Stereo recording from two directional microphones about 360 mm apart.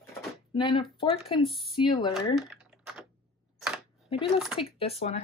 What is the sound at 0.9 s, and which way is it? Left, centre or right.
Speech, centre.